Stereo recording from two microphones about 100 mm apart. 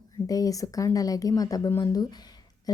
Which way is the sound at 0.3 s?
35° left (ahead or behind).